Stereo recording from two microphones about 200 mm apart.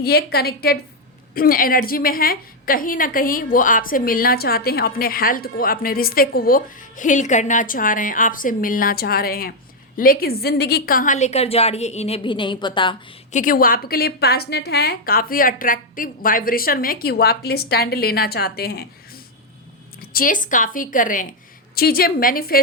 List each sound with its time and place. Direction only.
0.0 s a woman's voice: 50° left (ahead or behind); by 13.0 s 25° left (ahead or behind)
13.3 s a woman's voice: 45° left (ahead or behind)
20.0 s a woman's voice: 45° left (ahead or behind)